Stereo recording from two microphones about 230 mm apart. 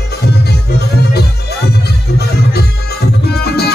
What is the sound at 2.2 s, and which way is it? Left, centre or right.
Music, left.